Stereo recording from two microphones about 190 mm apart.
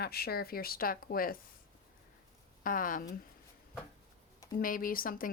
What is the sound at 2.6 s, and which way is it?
Speech, 45° left (ahead or behind).